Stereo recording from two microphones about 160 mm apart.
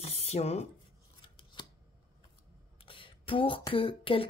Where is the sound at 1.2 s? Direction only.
30° left (ahead or behind).